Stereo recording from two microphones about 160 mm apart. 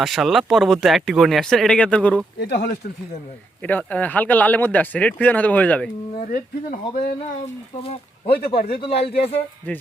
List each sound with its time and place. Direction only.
0.0 s speech: centre (ahead or behind)
2.4 s speech: 90° left
3.6 s speech: 10° left (ahead or behind)
6.1 s speech: 60° left (ahead or behind)
8.8 s speech: 35° left (ahead or behind)